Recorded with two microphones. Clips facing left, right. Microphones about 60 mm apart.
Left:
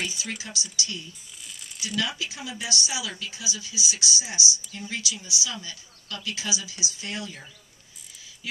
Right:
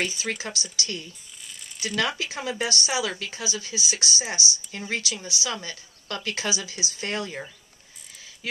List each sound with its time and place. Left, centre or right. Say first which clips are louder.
0.2 s a woman's voice: right 4 dB; right
1.8 s a woman's voice: right 3 dB; right